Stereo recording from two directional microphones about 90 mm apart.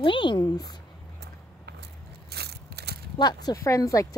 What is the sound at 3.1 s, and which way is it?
Speech, 50° left (ahead or behind).